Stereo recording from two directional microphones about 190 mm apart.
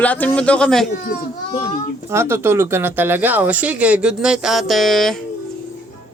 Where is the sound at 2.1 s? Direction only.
15° right (ahead or behind).